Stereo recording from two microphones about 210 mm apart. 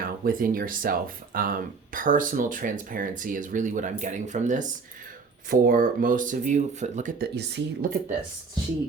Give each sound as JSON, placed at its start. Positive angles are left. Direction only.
{"t": 0.0, "sound": "speech", "side_deg": -40}